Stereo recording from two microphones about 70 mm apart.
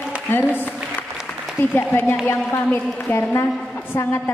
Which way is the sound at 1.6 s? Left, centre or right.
Left.